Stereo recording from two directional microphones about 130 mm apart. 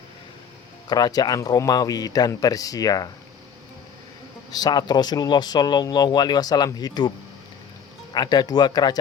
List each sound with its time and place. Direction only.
0.9 s speech: 30° left (ahead or behind)
4.5 s speech: 30° left (ahead or behind)
8.1 s speech: 30° left (ahead or behind)